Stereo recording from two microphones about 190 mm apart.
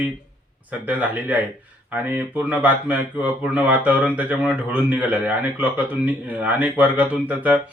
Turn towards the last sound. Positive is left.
turn(degrees=-10)  # may be behind; listen again after turning